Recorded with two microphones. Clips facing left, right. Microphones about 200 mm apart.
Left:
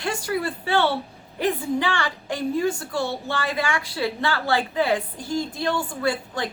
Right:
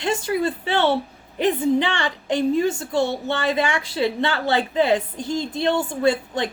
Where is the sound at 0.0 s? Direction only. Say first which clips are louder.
Right 4 dB; 20° right (ahead or behind).